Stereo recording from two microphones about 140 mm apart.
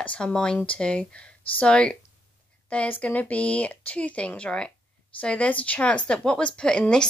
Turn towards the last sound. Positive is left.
turn(degrees=5)  # may be behind; listen again after turning